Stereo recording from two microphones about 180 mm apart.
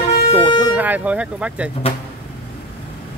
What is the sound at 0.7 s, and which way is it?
Speech, 10° right (ahead or behind).